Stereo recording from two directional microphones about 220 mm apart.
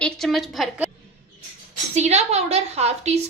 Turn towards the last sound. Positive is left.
turn(degrees=-30)  # may be behind; listen again after turning